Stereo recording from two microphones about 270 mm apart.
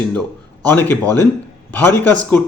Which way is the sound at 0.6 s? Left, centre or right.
Centre.